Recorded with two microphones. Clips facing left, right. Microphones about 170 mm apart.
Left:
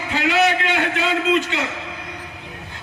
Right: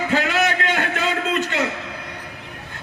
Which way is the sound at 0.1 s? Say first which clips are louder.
Left 4 dB; 50° right (ahead or behind).